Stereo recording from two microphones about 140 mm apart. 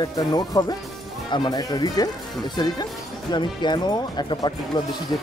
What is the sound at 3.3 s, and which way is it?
Speech, 30° left (ahead or behind).